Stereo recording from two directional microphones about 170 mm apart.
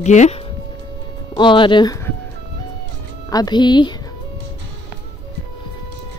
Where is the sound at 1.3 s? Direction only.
30° left (ahead or behind).